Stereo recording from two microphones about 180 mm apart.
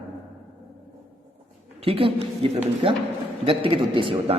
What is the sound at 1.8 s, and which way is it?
A man's voice, 30° right (ahead or behind).